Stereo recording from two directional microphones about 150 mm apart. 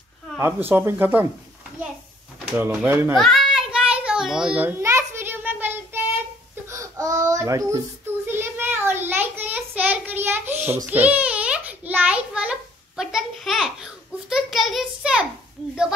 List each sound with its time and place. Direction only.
0.4 s speech: 15° right (ahead or behind)
2.5 s speech: 10° right (ahead or behind)
3.2 s a sound: centre (ahead or behind)
6.7 s baby cry: 20° right (ahead or behind)
8.3 s child singing: 15° right (ahead or behind)
10.9 s a sound: 10° right (ahead or behind)